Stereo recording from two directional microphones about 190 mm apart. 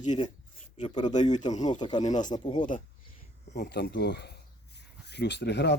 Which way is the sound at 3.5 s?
60° left (ahead or behind).